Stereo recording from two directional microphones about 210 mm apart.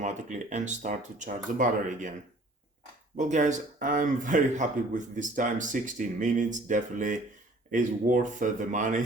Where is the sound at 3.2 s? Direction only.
35° right (ahead or behind).